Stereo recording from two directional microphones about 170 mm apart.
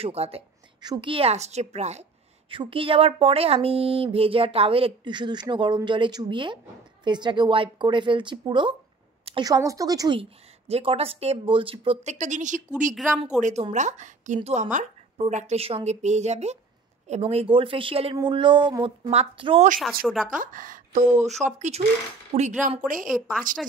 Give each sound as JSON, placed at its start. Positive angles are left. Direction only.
{"t": 0.0, "sound": "speech", "side_deg": -35}
{"t": 2.5, "sound": "a woman's voice", "side_deg": -30}
{"t": 19.8, "sound": "speech", "side_deg": 0}
{"t": 20.2, "sound": "a woman's voice", "side_deg": -50}
{"t": 21.5, "sound": "a woman's voice", "side_deg": -40}
{"t": 23.0, "sound": "speech", "side_deg": 0}